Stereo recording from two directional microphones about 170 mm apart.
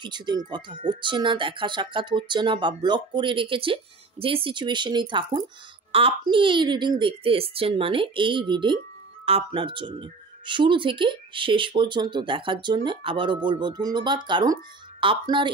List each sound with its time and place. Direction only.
0.0 s speech: 25° right (ahead or behind)